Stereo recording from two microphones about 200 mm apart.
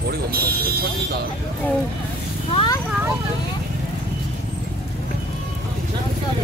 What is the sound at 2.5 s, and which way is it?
Speech, 25° left (ahead or behind).